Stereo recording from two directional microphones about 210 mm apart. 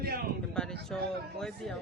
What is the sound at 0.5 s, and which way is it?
Speech, 5° left (ahead or behind).